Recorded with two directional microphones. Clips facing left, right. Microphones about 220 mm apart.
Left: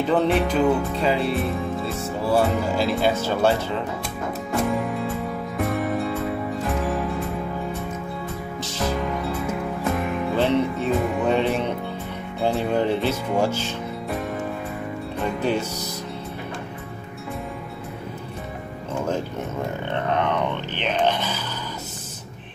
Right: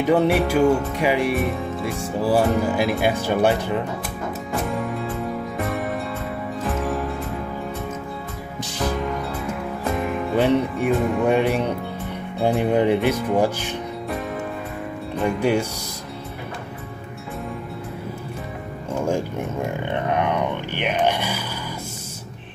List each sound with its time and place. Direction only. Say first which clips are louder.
0.0 s music: right 2 dB; 10° right (ahead or behind)
4.5 s music: left 3 dB; centre (ahead or behind)
9.9 s music: right 1 dB; centre (ahead or behind)
10.3 s music: right 2 dB; 15° right (ahead or behind)
11.0 s music: right 2 dB; centre (ahead or behind)
11.2 s music: right 2 dB; 15° right (ahead or behind)
15.2 s music: right 4 dB; 15° right (ahead or behind)
19.8 s a sound: even; 15° right (ahead or behind)